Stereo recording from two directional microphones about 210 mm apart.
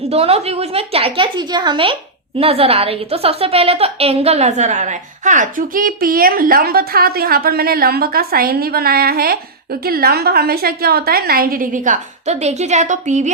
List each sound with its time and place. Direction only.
0.1 s a woman's voice: 30° right (ahead or behind)